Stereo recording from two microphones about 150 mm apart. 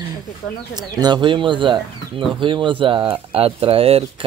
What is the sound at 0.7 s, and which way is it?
Speech, 25° right (ahead or behind).